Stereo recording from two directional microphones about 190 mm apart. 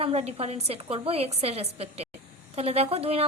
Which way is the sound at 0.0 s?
35° right (ahead or behind).